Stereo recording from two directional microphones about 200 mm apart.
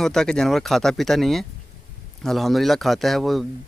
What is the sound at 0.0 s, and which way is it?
Speech, 5° left (ahead or behind).